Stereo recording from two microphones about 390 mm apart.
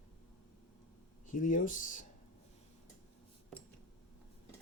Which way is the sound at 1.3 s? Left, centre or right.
Centre.